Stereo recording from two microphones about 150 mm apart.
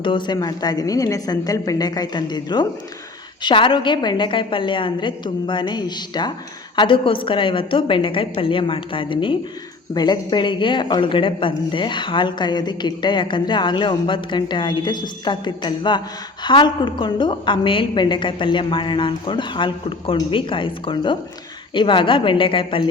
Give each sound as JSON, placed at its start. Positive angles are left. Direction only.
{"t": 0.0, "sound": "a woman's voice", "side_deg": 30}